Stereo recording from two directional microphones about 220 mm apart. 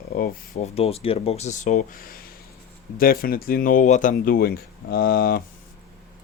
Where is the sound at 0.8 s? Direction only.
25° left (ahead or behind).